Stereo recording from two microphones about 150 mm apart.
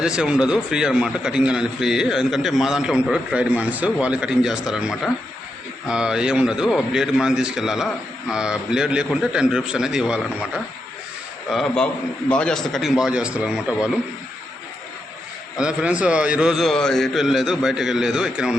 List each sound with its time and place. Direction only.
0.0 s a man's voice: 5° right (ahead or behind)
15.5 s a man's voice: 5° right (ahead or behind)